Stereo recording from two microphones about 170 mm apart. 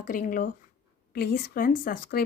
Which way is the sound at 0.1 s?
55° left (ahead or behind).